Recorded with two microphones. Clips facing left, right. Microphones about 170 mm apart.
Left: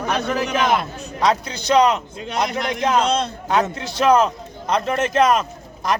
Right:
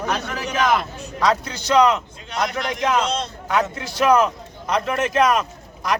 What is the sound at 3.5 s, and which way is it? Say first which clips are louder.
A man's voice: left 1 dB; 25° left (ahead or behind).